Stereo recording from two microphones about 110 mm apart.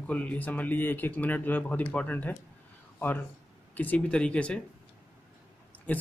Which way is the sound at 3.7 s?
15° left (ahead or behind).